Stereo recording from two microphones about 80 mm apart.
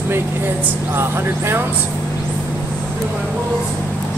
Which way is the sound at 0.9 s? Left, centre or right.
Right.